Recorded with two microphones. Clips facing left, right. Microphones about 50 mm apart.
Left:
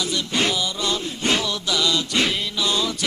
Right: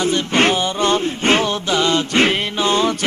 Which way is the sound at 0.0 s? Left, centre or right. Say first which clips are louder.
Right 7 dB; right.